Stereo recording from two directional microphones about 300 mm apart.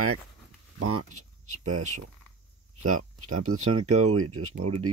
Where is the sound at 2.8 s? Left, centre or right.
Right.